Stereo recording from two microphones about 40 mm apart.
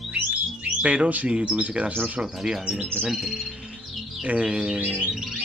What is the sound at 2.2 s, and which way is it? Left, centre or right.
Bird, centre.